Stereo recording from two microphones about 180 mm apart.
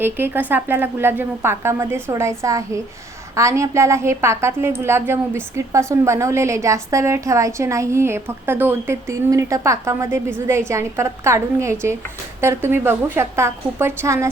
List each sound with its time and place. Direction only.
0.0 s a woman's voice: 10° right (ahead or behind)